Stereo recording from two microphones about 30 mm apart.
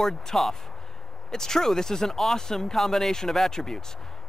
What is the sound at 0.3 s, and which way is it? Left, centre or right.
Speech, left.